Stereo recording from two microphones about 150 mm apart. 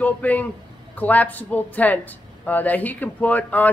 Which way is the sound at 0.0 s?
10° left (ahead or behind).